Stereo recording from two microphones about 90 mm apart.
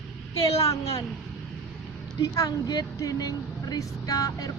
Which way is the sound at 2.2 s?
40° left (ahead or behind).